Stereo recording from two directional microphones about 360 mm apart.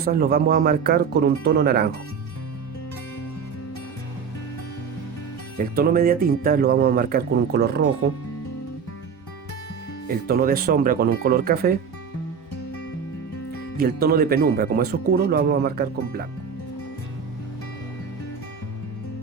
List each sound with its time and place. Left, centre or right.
0.0 s speech: right
5.5 s speech: right
10.2 s speech: right
13.7 s speech: right